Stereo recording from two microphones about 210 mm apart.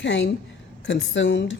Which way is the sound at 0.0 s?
60° left (ahead or behind).